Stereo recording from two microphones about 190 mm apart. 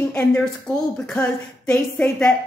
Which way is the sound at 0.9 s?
5° left (ahead or behind).